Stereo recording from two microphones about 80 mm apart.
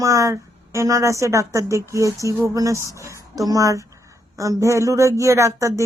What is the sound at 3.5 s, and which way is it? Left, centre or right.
A woman's voice, right.